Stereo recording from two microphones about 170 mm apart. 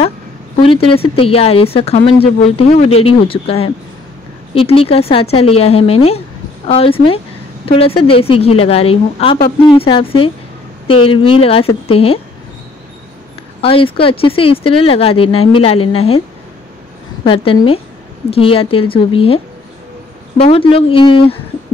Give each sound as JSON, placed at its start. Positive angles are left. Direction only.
{"t": 0.6, "sound": "speech", "side_deg": 30}
{"t": 13.6, "sound": "speech", "side_deg": 30}
{"t": 17.2, "sound": "speech", "side_deg": 30}